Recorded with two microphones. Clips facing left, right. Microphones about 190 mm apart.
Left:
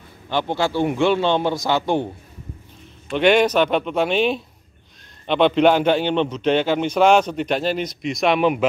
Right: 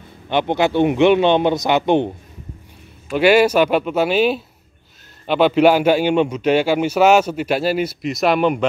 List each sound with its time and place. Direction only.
0.3 s a man's voice: 20° right (ahead or behind)
3.1 s a man's voice: 5° right (ahead or behind)